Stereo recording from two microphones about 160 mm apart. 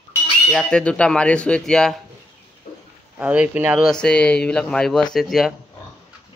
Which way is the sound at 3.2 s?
10° right (ahead or behind).